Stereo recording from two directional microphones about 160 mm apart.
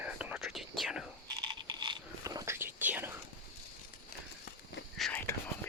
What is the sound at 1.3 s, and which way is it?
Whispering, 25° right (ahead or behind).